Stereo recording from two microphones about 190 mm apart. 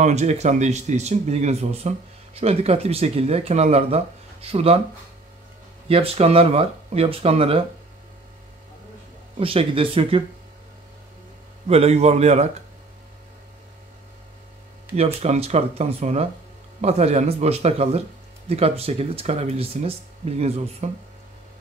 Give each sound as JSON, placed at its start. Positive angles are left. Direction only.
{"t": 0.0, "sound": "speech", "side_deg": -35}
{"t": 5.9, "sound": "speech", "side_deg": -30}
{"t": 9.4, "sound": "speech", "side_deg": -30}
{"t": 11.6, "sound": "speech", "side_deg": -35}
{"t": 15.1, "sound": "speech", "side_deg": -35}